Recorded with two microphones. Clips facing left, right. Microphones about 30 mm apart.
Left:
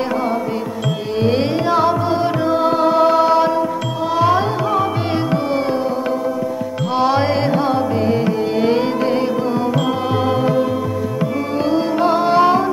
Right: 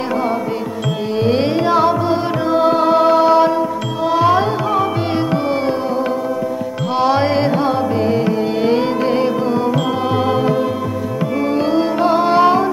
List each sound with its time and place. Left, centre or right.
1.1 s tuning fork: centre
1.4 s music: centre
6.9 s music: centre
9.0 s music: right